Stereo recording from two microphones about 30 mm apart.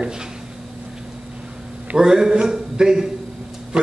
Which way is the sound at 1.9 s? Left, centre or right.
Centre.